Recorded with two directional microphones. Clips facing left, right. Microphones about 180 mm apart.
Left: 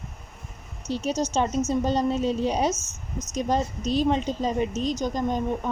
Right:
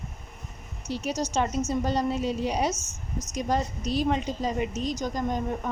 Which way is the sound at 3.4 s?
25° left (ahead or behind).